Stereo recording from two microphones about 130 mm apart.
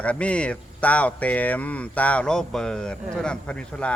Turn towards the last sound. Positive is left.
turn(degrees=10)  # may be behind; listen again after turning